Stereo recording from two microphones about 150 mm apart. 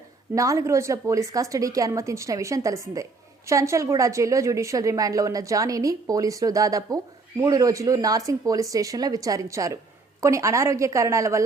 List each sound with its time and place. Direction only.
0.3 s a woman's voice: 20° right (ahead or behind)